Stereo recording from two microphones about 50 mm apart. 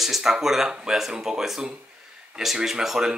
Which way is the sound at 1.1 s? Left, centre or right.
Centre.